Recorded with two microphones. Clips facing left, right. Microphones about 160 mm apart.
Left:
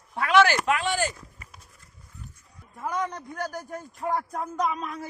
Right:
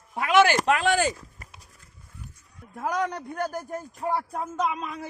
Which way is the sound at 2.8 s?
85° right.